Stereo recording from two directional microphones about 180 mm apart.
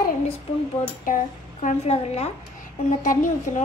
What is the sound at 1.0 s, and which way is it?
A woman's voice, 45° left (ahead or behind).